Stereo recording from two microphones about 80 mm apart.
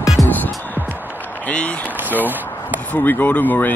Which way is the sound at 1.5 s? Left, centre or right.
Centre.